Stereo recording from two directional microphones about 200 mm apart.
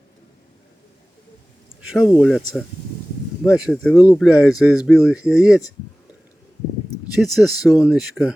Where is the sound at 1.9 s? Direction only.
Centre (ahead or behind).